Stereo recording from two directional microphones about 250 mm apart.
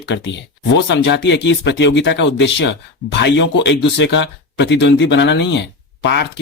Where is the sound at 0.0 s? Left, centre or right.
Left.